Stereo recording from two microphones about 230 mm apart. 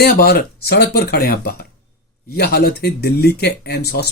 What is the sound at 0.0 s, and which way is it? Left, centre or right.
Speech, left.